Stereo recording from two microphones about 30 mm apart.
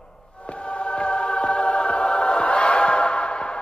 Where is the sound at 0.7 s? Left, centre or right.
Left.